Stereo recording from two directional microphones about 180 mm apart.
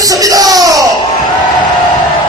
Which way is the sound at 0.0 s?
20° right (ahead or behind).